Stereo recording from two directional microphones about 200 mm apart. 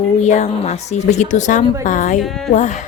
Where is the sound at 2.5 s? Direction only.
40° left (ahead or behind).